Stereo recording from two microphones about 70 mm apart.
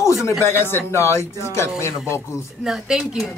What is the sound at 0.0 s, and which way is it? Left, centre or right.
Speech, left.